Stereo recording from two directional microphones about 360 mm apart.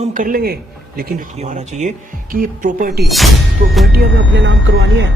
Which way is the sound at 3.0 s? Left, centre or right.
Centre.